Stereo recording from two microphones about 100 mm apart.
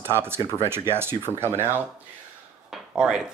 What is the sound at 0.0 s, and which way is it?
Speech, 25° right (ahead or behind).